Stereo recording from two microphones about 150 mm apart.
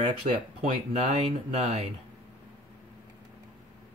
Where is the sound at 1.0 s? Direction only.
45° right (ahead or behind).